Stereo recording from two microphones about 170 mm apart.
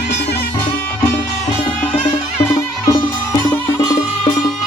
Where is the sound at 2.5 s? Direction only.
15° left (ahead or behind).